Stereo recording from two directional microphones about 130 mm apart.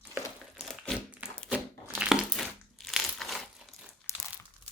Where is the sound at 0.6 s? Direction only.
Centre (ahead or behind).